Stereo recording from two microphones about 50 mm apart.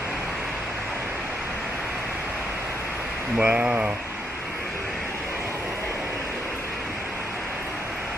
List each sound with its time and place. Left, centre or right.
3.3 s speech: right